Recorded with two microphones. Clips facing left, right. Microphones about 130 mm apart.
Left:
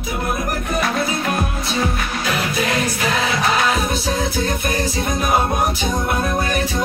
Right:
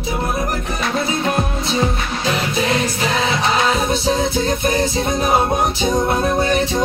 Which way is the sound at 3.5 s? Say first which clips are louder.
Right 2 dB; 25° right (ahead or behind).